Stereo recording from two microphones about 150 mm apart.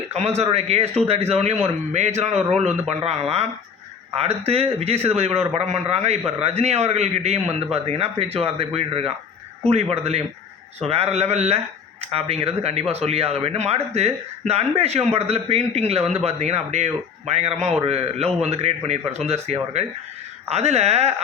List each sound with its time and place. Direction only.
0.1 s speech: 45° right (ahead or behind)